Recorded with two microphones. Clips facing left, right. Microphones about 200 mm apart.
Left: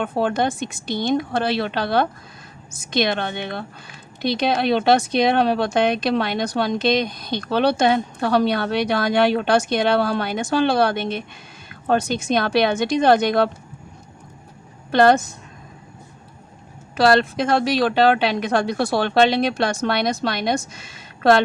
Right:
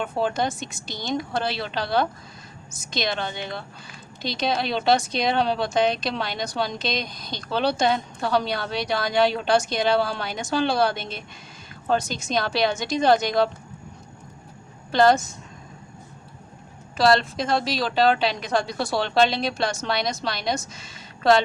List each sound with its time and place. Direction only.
0.0 s a woman's voice: 55° left (ahead or behind)
14.9 s a woman's voice: 60° left (ahead or behind)
17.0 s a woman's voice: 60° left (ahead or behind)